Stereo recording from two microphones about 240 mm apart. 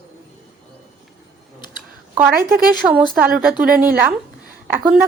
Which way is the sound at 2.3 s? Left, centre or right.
Right.